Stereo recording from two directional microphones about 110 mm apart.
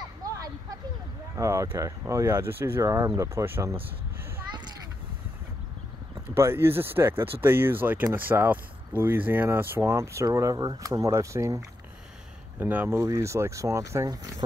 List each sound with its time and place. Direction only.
0.2 s vehicle: 35° right (ahead or behind)
1.3 s speech: 25° right (ahead or behind)
6.3 s speech: 20° right (ahead or behind)
12.5 s speech: 15° right (ahead or behind); by 14.4 s 35° right (ahead or behind)